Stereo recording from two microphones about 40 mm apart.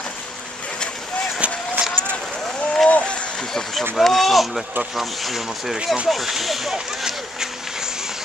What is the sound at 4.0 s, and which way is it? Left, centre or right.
Speech, centre.